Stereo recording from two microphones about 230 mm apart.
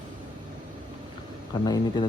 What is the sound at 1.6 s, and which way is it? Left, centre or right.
Speech, centre.